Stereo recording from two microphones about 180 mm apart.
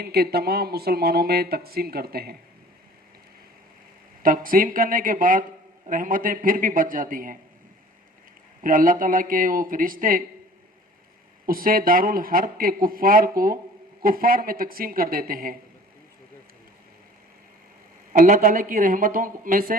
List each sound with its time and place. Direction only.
0.0 s speech: 60° right (ahead or behind)
4.2 s speech: 50° right (ahead or behind)
8.6 s speech: 50° right (ahead or behind)
11.4 s speech: 55° right (ahead or behind)
18.1 s speech: 50° right (ahead or behind)